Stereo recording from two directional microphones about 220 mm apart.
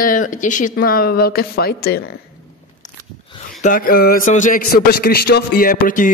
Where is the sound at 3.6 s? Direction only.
40° left (ahead or behind).